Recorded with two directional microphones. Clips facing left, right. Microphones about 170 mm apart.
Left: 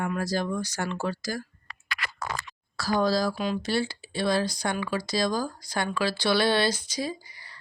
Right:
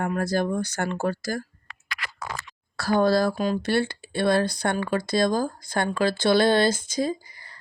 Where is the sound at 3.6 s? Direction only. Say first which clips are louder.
Right 4 dB; 60° right (ahead or behind).